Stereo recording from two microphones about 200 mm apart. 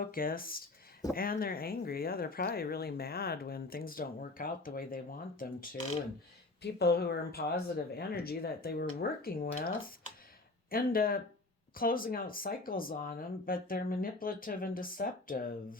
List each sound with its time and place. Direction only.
0.0 s speech: 45° left (ahead or behind)